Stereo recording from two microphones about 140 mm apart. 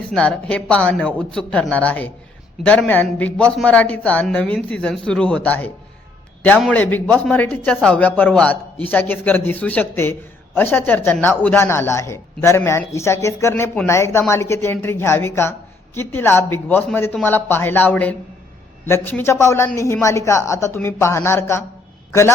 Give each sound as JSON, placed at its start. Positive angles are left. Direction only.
{"t": 0.1, "sound": "a man's voice", "side_deg": 10}